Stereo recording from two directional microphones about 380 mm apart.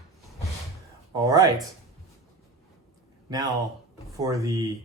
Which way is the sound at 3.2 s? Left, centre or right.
Centre.